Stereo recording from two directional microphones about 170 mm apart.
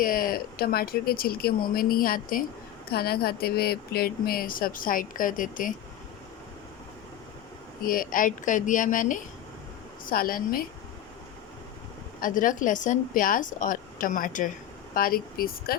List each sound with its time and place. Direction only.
0.0 s speech: 55° left (ahead or behind)
2.9 s speech: 65° left (ahead or behind); by 5.7 s 50° left (ahead or behind)
7.8 s a woman's voice: 55° left (ahead or behind)
12.2 s a woman's voice: 50° left (ahead or behind)